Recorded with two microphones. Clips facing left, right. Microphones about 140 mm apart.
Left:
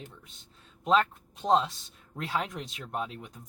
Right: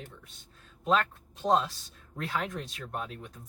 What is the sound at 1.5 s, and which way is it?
Speech, 25° left (ahead or behind).